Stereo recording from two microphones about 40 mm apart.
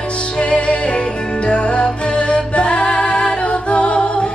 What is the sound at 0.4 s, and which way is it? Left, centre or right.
Music, left.